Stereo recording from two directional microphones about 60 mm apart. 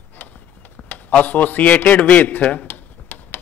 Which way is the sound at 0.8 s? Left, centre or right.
Left.